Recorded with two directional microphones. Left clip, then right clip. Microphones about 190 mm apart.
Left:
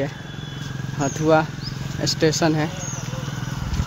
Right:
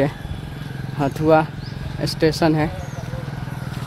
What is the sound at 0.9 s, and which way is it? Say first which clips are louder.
Speech: right 2 dB; 10° right (ahead or behind).